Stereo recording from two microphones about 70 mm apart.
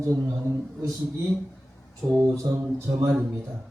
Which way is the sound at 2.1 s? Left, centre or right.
Right.